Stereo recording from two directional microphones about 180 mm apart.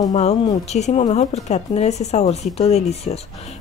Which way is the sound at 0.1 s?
35° left (ahead or behind).